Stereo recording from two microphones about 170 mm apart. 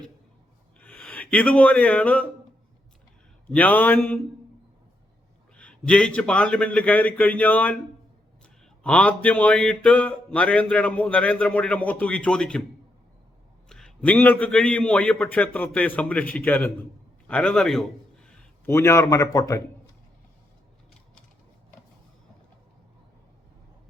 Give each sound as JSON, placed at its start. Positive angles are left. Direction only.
{"t": 0.8, "sound": "speech", "side_deg": 5}
{"t": 3.5, "sound": "speech", "side_deg": 10}
{"t": 5.5, "sound": "speech", "side_deg": 5}
{"t": 8.8, "sound": "speech", "side_deg": 5}
{"t": 13.7, "sound": "speech", "side_deg": 5}
{"t": 17.2, "sound": "a sound", "side_deg": 5}
{"t": 18.7, "sound": "speech", "side_deg": 15}